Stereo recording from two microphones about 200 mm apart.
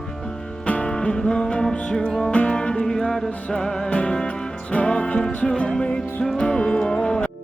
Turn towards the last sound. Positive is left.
turn(degrees=5)  # may be behind; listen again after turning